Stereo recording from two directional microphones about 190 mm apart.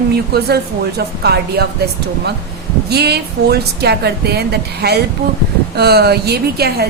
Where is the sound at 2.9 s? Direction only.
60° right (ahead or behind).